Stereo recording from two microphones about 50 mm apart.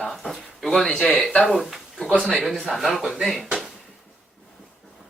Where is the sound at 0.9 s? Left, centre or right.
Centre.